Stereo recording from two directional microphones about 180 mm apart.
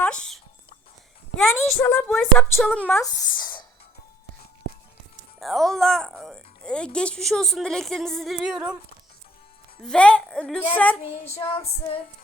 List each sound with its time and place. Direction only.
0.0 s dog: 5° left (ahead or behind)
1.5 s a woman's voice: 10° left (ahead or behind)
3.4 s music: 25° left (ahead or behind)
5.4 s speech: centre (ahead or behind)
9.8 s a woman's voice: 5° left (ahead or behind)
11.4 s female singing: 30° left (ahead or behind)